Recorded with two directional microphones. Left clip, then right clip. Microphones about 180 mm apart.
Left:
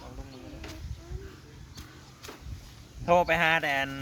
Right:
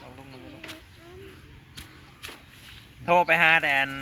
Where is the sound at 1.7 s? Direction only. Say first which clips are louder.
Right 4 dB; 15° left (ahead or behind).